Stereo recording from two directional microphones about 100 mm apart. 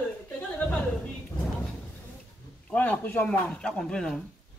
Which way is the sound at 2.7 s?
15° left (ahead or behind).